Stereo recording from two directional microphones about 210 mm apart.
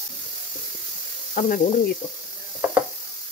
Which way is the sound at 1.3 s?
40° left (ahead or behind).